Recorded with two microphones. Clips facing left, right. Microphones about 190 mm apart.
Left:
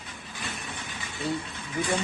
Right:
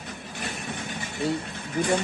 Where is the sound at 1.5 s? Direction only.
60° right (ahead or behind).